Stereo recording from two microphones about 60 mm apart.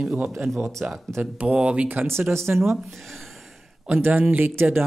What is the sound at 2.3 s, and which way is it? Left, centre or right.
Speech, right.